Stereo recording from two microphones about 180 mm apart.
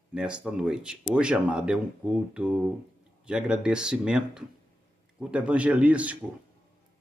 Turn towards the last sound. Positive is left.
turn(degrees=-5)  # may be behind; listen again after turning